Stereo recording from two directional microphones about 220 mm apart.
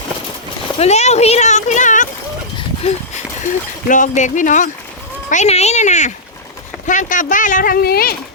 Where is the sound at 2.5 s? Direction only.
30° left (ahead or behind).